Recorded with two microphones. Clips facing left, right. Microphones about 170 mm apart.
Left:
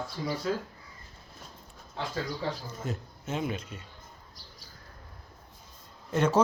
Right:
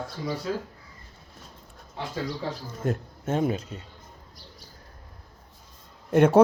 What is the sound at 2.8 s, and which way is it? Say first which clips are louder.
Speech: right 9 dB; 55° right (ahead or behind).